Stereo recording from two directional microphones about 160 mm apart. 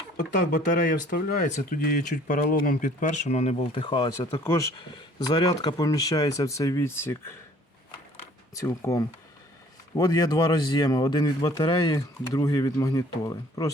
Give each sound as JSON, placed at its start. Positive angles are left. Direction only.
{"t": 0.2, "sound": "speech", "side_deg": 55}
{"t": 3.7, "sound": "speech", "side_deg": 30}
{"t": 8.5, "sound": "speech", "side_deg": 20}